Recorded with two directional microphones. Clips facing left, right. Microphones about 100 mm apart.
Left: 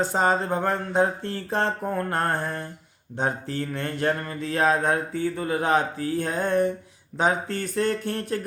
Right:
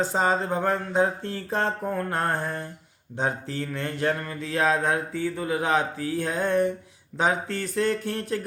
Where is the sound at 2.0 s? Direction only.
55° left (ahead or behind).